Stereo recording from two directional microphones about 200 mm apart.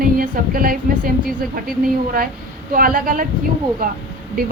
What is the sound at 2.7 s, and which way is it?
A woman's voice, 45° right (ahead or behind).